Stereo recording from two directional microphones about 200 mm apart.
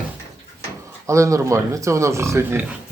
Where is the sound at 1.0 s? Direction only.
15° right (ahead or behind).